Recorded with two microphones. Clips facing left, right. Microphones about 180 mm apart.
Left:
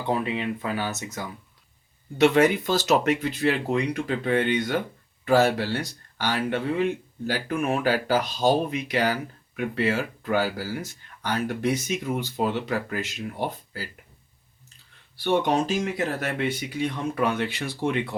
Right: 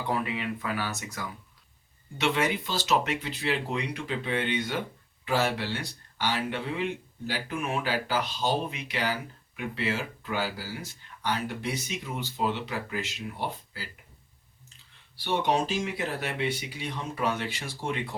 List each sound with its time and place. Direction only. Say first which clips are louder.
0.1 s speech: left 5 dB; 25° left (ahead or behind)
2.2 s speech: left 9 dB; 45° left (ahead or behind)
15.2 s speech: left 4 dB; 50° left (ahead or behind)